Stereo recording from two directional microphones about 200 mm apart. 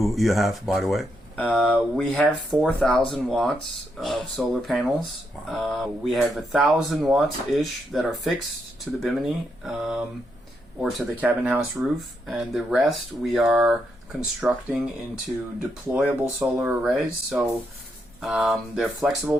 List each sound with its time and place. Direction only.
0.0 s speech: centre (ahead or behind)
15.9 s speech: centre (ahead or behind)